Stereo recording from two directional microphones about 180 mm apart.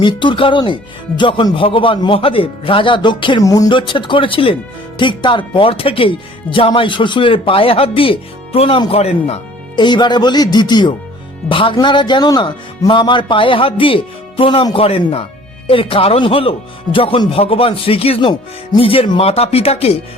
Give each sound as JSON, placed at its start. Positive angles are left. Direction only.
{"t": 0.0, "sound": "speech", "side_deg": 25}